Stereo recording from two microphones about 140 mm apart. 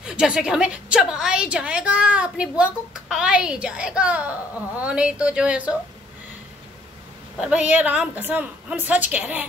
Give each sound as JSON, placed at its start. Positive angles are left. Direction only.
{"t": 0.0, "sound": "a woman's voice", "side_deg": -5}
{"t": 7.3, "sound": "a woman's voice", "side_deg": -5}